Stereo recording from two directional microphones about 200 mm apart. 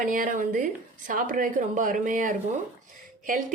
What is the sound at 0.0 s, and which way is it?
A woman's voice, 40° right (ahead or behind).